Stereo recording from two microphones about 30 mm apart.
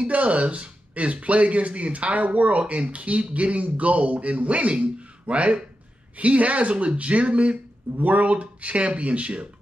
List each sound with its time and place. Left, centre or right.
0.0 s speech: right
2.6 s speech: right
8.0 s speech: right